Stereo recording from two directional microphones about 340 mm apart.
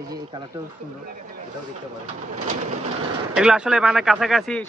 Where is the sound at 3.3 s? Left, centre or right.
Centre.